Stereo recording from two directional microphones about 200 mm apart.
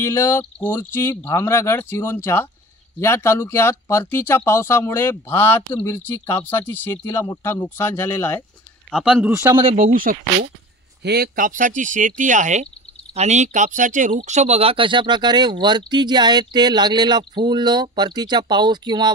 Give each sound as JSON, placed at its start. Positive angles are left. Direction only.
{"t": 0.0, "sound": "speech", "side_deg": 15}
{"t": 5.7, "sound": "speech", "side_deg": 25}
{"t": 6.0, "sound": "speech", "side_deg": 10}
{"t": 8.9, "sound": "a man's voice", "side_deg": 0}
{"t": 9.3, "sound": "speech", "side_deg": -20}
{"t": 9.7, "sound": "speech", "side_deg": -40}